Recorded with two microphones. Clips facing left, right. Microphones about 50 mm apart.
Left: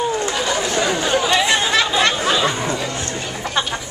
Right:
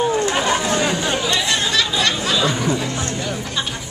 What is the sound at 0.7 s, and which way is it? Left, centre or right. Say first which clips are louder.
Chatter: left 1 dB; left.